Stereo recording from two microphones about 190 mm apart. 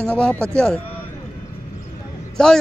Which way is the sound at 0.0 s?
5° left (ahead or behind).